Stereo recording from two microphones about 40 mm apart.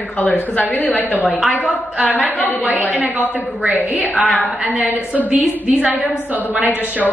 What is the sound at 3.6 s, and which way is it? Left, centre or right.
Speech, right.